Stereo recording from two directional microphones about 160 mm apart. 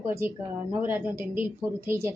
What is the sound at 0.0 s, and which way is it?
A woman's voice, 15° right (ahead or behind).